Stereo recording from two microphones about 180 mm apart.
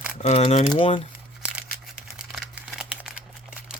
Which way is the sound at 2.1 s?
Centre (ahead or behind).